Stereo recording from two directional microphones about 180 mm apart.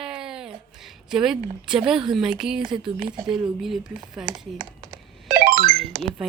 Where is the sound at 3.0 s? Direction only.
25° right (ahead or behind).